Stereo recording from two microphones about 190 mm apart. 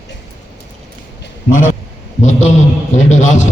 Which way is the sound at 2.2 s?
40° left (ahead or behind).